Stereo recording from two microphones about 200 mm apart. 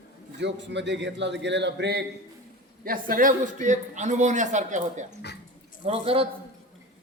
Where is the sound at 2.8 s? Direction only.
45° right (ahead or behind); by 6.3 s 30° right (ahead or behind).